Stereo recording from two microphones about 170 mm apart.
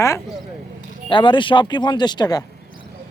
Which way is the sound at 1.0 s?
30° left (ahead or behind).